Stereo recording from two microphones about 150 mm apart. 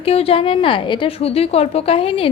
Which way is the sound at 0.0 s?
40° left (ahead or behind).